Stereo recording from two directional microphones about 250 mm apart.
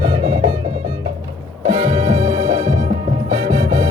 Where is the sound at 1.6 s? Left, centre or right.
Centre.